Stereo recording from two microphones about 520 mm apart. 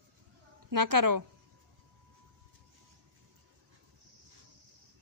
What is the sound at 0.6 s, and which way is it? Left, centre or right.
Speech, right.